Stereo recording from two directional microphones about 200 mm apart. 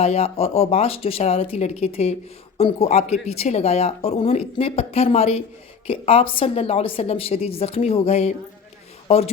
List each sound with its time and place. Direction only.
0.0 s a woman's voice: 30° left (ahead or behind)